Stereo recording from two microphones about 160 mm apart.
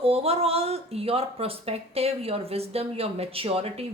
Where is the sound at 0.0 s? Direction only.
40° right (ahead or behind).